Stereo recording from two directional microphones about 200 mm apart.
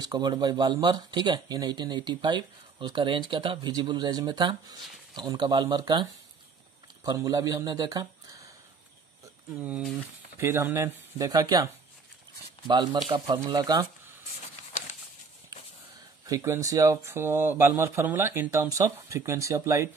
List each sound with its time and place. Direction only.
0.0 s speech: 20° right (ahead or behind)
9.6 s speech: 5° right (ahead or behind)
16.3 s speech: 15° right (ahead or behind)